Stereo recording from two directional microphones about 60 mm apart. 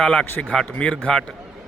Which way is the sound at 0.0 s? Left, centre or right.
Centre.